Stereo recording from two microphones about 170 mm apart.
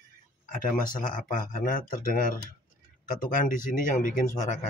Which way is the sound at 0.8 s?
55° left (ahead or behind).